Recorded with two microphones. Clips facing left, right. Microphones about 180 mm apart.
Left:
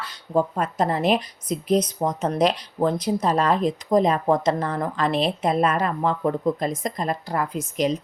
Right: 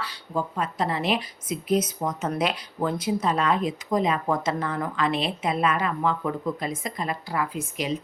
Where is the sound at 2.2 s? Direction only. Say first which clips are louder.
Left 6 dB; 35° left (ahead or behind).